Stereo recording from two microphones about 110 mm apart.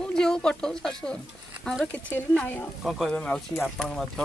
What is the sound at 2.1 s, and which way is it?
Speech, 15° left (ahead or behind).